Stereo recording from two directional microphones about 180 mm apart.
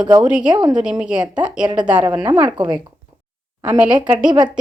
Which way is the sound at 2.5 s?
25° right (ahead or behind).